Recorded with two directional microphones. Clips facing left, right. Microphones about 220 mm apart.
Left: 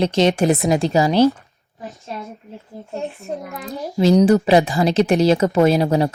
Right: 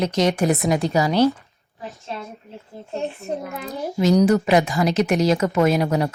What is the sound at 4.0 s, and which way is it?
Speech, 30° left (ahead or behind).